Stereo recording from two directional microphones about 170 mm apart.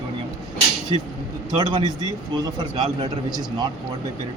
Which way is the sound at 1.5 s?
25° right (ahead or behind).